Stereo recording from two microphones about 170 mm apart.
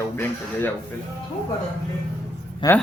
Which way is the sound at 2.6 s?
25° left (ahead or behind).